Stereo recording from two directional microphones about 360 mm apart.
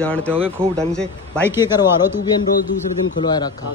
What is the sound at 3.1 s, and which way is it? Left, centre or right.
Speech, centre.